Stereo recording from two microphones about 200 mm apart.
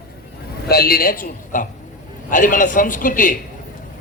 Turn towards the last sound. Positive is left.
turn(degrees=40)  # may be behind; listen again after turning